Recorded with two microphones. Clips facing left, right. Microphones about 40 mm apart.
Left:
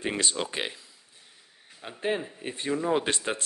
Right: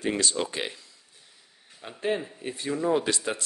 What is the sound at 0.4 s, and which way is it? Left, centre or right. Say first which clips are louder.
Speech: right 1 dB; centre.